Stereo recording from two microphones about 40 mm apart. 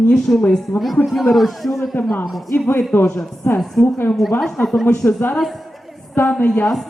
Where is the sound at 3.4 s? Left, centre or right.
Left.